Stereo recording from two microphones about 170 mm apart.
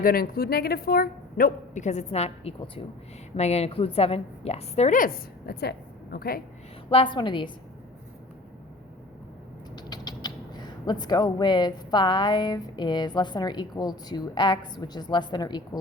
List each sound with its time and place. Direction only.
0.0 s a woman's voice: 60° left (ahead or behind)
6.9 s a woman's voice: 30° left (ahead or behind)
9.7 s creak: 25° left (ahead or behind)